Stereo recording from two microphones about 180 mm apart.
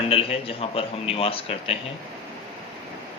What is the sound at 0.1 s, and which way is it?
A man's voice, 30° left (ahead or behind).